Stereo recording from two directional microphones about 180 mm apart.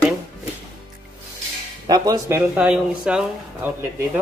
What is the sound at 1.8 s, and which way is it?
Speech, 20° right (ahead or behind).